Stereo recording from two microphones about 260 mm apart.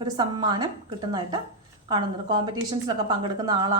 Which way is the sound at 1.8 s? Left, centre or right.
Centre.